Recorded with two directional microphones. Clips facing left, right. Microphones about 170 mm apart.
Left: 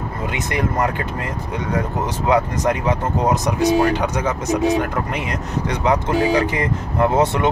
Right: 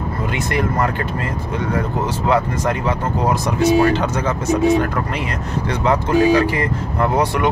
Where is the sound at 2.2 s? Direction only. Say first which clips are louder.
Left 1 dB; 15° left (ahead or behind).